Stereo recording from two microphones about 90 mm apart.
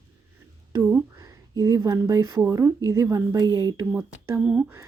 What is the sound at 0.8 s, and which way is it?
Speech, 10° right (ahead or behind).